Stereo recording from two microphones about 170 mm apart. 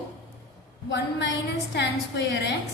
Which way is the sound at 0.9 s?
90° left.